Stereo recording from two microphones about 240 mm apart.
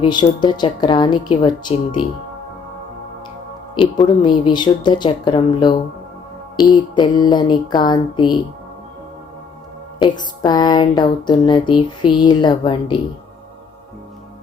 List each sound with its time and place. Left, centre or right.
0.0 s a woman's voice: centre
3.8 s a woman's voice: centre
10.0 s speech: centre